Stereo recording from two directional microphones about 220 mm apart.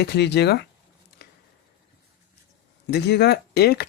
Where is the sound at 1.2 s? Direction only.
45° left (ahead or behind).